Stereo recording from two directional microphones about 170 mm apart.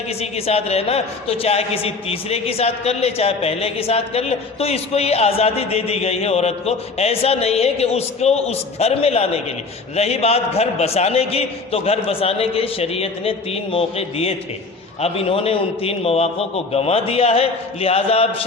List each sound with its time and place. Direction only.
0.2 s a man's voice: 35° left (ahead or behind)